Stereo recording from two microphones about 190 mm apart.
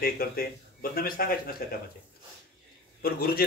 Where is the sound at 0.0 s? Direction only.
50° left (ahead or behind).